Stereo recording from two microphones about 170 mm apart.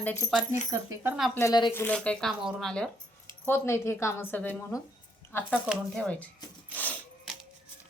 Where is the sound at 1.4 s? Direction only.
20° left (ahead or behind).